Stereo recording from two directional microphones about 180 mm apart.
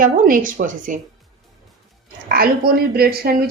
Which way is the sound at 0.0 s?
50° right (ahead or behind).